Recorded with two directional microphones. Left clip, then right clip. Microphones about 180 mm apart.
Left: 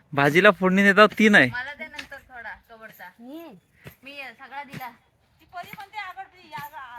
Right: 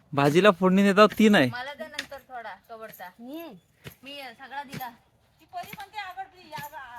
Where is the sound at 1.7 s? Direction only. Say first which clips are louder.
Even; 30° right (ahead or behind).